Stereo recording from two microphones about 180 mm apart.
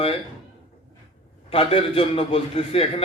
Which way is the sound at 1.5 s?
30° left (ahead or behind).